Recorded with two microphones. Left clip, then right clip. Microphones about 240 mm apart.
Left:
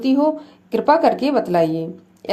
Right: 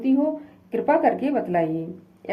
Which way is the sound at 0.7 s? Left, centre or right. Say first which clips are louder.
Left 5 dB; left.